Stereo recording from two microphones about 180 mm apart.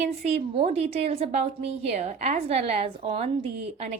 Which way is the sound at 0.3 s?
35° right (ahead or behind).